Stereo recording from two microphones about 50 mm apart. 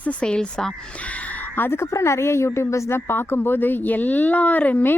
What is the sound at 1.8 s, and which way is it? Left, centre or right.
Speech, left.